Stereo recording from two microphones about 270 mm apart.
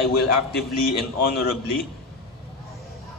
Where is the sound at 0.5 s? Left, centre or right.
Left.